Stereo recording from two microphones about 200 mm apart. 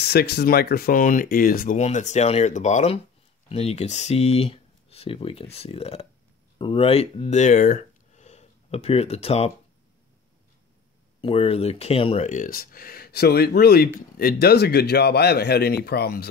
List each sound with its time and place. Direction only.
0.0 s a man's voice: 55° left (ahead or behind)
1.8 s speech: 35° left (ahead or behind)
11.1 s speech: 30° left (ahead or behind)
12.3 s a man's voice: 45° left (ahead or behind)